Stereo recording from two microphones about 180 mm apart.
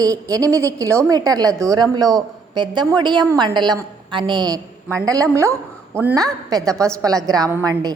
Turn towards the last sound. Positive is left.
turn(degrees=-20)  # may be behind; listen again after turning